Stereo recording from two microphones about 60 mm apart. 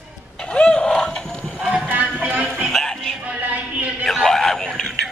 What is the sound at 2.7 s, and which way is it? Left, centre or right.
Music, centre.